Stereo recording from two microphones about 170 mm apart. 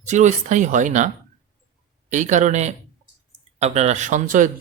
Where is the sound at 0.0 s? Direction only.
45° right (ahead or behind).